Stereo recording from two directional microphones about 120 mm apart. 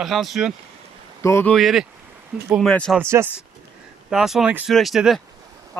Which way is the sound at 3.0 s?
20° right (ahead or behind).